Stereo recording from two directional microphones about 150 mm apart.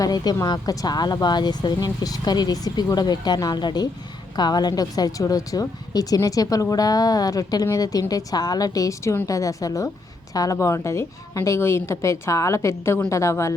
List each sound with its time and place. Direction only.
0.0 s speech: 25° left (ahead or behind)